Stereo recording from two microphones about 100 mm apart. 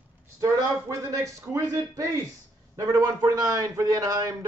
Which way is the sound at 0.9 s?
30° right (ahead or behind).